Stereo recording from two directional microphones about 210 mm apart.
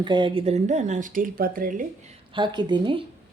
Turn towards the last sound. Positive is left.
turn(degrees=-20)  # may be behind; listen again after turning